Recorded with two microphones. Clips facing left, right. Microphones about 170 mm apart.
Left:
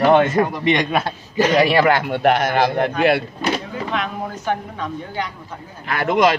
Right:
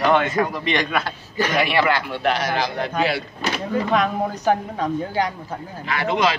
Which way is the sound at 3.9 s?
40° right (ahead or behind).